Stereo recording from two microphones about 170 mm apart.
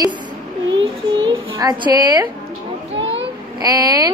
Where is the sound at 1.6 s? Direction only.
25° right (ahead or behind).